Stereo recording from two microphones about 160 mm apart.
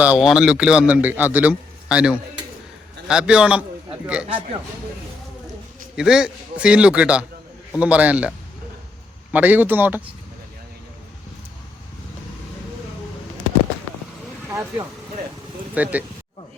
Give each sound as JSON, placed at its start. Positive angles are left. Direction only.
{"t": 0.0, "sound": "a man's voice", "side_deg": -5}
{"t": 6.0, "sound": "a man's voice", "side_deg": -5}
{"t": 9.3, "sound": "a man's voice", "side_deg": -10}
{"t": 14.5, "sound": "a man's voice", "side_deg": -20}